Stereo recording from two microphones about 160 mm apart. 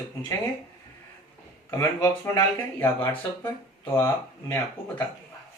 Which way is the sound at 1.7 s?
15° left (ahead or behind).